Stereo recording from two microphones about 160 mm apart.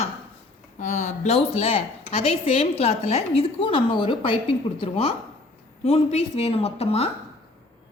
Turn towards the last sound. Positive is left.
turn(degrees=40)  # may be behind; listen again after turning